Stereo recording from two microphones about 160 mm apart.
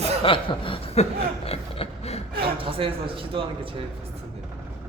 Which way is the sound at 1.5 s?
35° left (ahead or behind).